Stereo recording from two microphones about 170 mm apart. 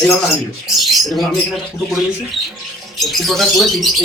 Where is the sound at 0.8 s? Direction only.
Centre (ahead or behind).